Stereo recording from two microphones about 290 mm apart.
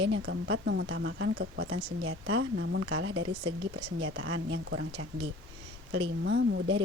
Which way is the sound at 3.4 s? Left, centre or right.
Centre.